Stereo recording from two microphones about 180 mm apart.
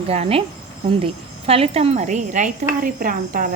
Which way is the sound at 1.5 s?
35° right (ahead or behind).